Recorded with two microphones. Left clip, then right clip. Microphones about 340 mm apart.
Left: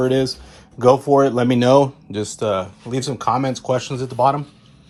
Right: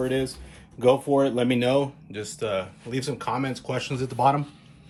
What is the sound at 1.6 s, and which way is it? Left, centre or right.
A man's voice, centre.